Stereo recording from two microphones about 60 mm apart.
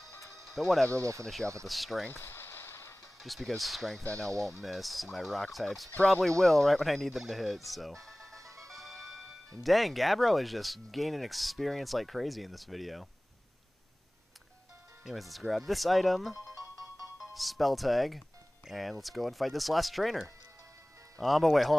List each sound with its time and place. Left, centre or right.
0.6 s speech: centre
0.9 s speech: right
1.7 s speech: centre
2.0 s a sound: left
3.2 s speech: centre
8.0 s music: centre
8.4 s music: right
9.5 s speech: centre
15.0 s speech: centre